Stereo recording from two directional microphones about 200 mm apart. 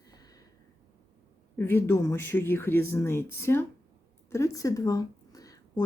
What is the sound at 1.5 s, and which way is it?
Speech, 10° left (ahead or behind).